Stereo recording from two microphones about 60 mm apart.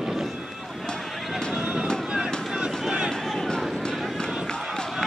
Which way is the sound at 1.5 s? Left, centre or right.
Right.